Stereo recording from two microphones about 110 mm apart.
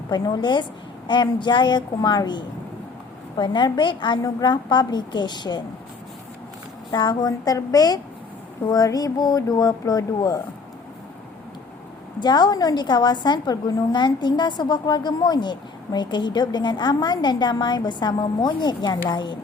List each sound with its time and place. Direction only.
0.1 s a woman's voice: 40° left (ahead or behind)
6.9 s a woman's voice: 40° left (ahead or behind)
12.2 s a woman's voice: 40° left (ahead or behind)